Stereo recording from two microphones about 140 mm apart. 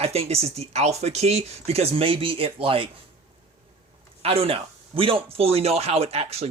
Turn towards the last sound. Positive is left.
turn(degrees=-45)  # may be behind; listen again after turning